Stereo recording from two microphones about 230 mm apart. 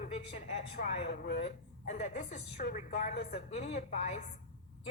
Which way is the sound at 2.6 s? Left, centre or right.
Left.